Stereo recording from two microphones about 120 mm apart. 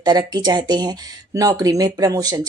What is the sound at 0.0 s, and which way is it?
Speech, 35° right (ahead or behind).